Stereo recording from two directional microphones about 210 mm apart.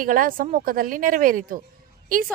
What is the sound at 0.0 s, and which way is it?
A woman's voice, 40° right (ahead or behind).